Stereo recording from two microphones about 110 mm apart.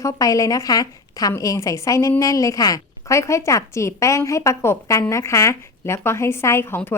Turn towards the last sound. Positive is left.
turn(degrees=20)  # may be behind; listen again after turning